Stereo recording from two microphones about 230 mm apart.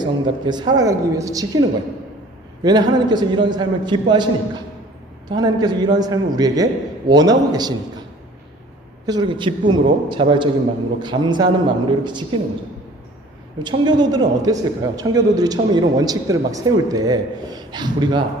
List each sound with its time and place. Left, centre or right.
0.0 s a woman's voice: centre
5.3 s a woman's voice: centre
9.0 s a man's voice: centre
13.6 s a woman's voice: centre